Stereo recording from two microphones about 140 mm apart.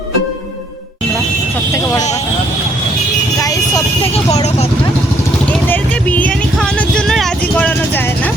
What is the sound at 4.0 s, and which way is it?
Vehicle, 45° left (ahead or behind).